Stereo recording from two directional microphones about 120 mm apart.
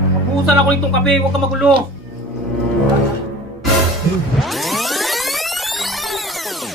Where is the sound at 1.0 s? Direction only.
Centre (ahead or behind).